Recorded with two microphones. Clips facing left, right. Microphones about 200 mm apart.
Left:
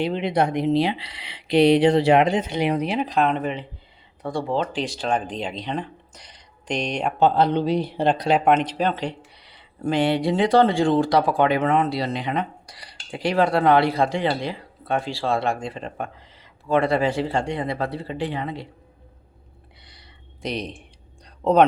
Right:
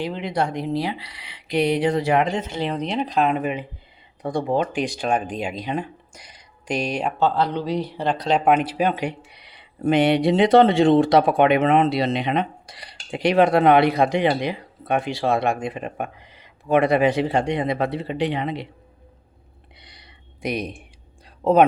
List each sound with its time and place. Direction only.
0.0 s speech: 25° left (ahead or behind)
2.3 s speech: 15° left (ahead or behind); by 7.1 s 5° right (ahead or behind)
7.2 s speech: 20° left (ahead or behind)
8.4 s speech: 5° right (ahead or behind)
19.8 s a sound: 20° right (ahead or behind)
21.4 s speech: 5° right (ahead or behind)